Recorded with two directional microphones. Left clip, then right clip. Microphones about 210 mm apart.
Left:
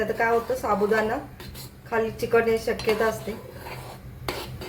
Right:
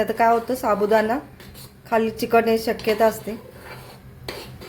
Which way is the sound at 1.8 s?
45° right (ahead or behind).